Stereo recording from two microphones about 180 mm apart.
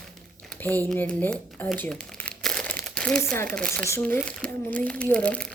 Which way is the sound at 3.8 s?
10° left (ahead or behind).